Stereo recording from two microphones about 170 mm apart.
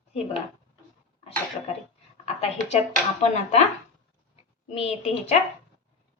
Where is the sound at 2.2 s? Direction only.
40° left (ahead or behind).